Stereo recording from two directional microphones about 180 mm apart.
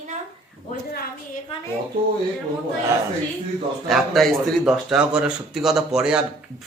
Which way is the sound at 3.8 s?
Centre (ahead or behind).